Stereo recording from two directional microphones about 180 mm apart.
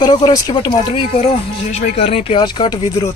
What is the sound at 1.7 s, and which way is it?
Speech, 35° left (ahead or behind).